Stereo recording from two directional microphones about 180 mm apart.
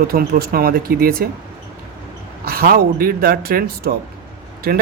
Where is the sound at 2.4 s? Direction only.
55° right (ahead or behind).